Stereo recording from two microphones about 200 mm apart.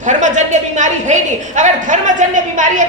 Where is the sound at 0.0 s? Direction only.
40° right (ahead or behind).